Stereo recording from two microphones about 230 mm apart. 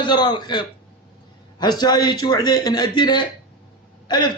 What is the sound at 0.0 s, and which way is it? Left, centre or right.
A man's voice, centre.